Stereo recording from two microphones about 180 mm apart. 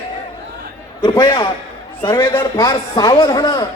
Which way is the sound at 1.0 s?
25° left (ahead or behind).